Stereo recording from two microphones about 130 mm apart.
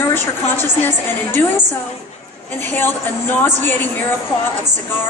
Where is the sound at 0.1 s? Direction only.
15° left (ahead or behind).